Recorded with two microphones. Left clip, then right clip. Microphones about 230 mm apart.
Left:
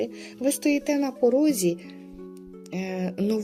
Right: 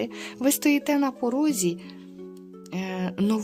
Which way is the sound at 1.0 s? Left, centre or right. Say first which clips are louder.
Left 4 dB; right.